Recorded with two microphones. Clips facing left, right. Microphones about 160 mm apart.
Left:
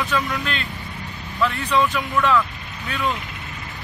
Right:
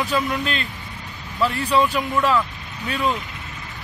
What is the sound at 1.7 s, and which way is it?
Speech, 35° right (ahead or behind).